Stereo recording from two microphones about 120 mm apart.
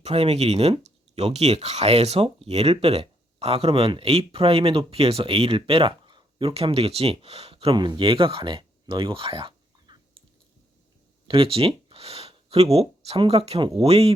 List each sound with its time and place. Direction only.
0.0 s speech: 60° right (ahead or behind); by 6.5 s 45° right (ahead or behind)
6.5 s speech: 55° right (ahead or behind)
11.3 s a sound: 50° right (ahead or behind)
12.7 s speech: 55° right (ahead or behind)